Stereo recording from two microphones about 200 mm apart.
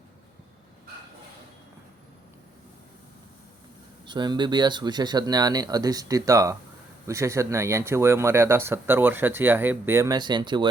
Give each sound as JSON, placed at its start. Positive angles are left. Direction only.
{"t": 4.0, "sound": "speech", "side_deg": -20}